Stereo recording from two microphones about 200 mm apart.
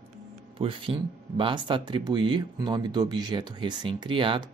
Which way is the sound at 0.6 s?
25° right (ahead or behind).